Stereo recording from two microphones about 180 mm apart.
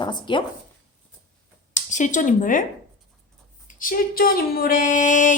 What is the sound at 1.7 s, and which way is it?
Speech, 45° left (ahead or behind).